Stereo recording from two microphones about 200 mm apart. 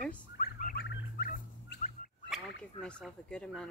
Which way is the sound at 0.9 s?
55° left (ahead or behind).